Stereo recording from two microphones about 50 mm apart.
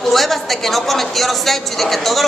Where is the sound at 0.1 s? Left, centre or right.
Centre.